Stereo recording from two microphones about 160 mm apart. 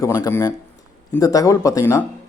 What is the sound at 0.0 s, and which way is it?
A man's voice, 20° left (ahead or behind).